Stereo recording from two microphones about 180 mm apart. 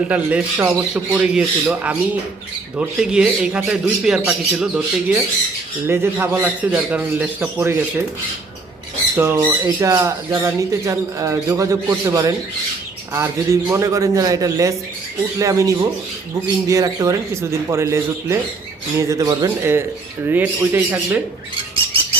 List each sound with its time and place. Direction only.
0.1 s speech: 10° right (ahead or behind)
9.1 s speech: 10° right (ahead or behind)